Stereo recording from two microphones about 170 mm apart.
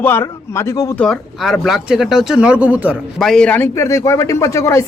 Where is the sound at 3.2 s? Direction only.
5° left (ahead or behind).